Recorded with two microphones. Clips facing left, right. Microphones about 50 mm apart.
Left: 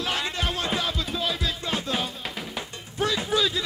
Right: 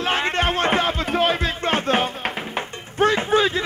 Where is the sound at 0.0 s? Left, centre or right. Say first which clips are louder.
Right 7 dB; right.